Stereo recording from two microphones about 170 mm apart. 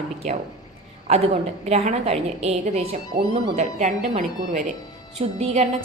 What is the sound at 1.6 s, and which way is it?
A woman's voice, 40° right (ahead or behind).